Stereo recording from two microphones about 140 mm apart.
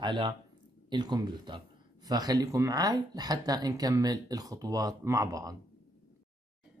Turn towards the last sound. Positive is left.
turn(degrees=-25)  # may be behind; listen again after turning